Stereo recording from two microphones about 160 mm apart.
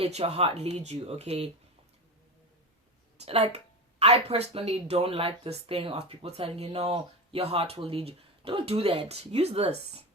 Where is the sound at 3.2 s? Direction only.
40° right (ahead or behind).